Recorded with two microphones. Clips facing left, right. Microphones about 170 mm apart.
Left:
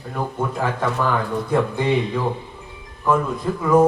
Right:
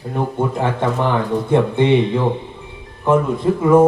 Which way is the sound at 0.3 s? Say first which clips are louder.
Right 3 dB; 25° right (ahead or behind).